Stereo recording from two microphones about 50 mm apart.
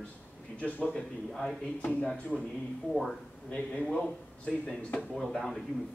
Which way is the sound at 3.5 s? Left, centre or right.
Left.